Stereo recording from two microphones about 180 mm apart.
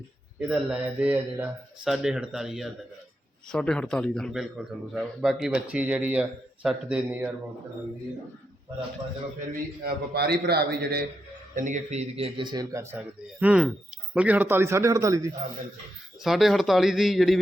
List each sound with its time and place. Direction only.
0.3 s a man's voice: 5° right (ahead or behind)
9.5 s a man's voice: 60° right (ahead or behind)
11.5 s a man's voice: 45° right (ahead or behind); by 13.0 s 15° right (ahead or behind)
13.4 s speech: 5° right (ahead or behind)
16.2 s a man's voice: centre (ahead or behind)